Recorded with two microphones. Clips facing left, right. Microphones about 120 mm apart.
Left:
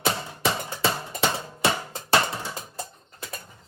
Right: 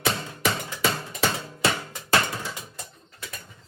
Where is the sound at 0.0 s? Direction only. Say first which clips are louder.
Even; 20° left (ahead or behind).